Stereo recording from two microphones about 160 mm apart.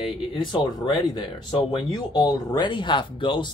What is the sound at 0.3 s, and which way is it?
Speech, 30° left (ahead or behind).